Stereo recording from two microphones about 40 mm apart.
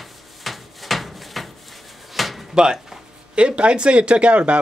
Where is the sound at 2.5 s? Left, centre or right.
Centre.